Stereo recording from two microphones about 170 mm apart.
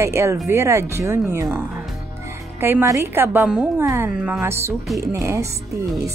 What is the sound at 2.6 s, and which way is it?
Speech, 15° right (ahead or behind).